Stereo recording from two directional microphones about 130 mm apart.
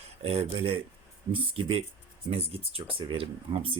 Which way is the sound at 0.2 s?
50° right (ahead or behind).